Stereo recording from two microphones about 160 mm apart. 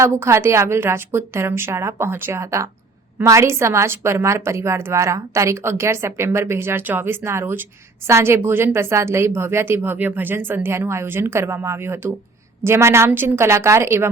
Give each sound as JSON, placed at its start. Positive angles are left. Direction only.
{"t": 0.0, "sound": "a woman's voice", "side_deg": -15}